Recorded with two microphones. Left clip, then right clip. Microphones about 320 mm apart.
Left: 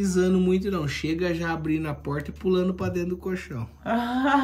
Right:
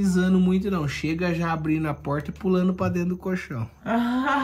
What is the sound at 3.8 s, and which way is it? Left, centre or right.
Speech, left.